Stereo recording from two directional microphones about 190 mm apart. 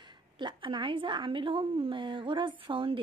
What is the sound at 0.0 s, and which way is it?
Speech, 25° right (ahead or behind).